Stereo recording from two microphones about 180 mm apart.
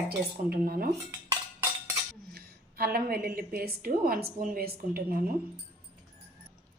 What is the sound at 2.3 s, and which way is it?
A woman's voice, 60° right (ahead or behind).